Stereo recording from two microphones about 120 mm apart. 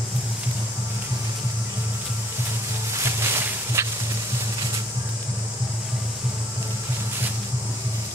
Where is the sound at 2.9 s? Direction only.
20° right (ahead or behind).